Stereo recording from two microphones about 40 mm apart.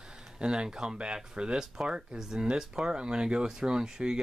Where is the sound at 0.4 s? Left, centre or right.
Right.